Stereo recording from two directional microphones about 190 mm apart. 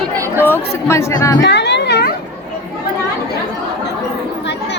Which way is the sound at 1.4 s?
60° left (ahead or behind).